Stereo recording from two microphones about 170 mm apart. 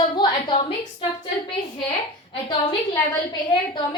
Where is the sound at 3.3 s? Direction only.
25° left (ahead or behind).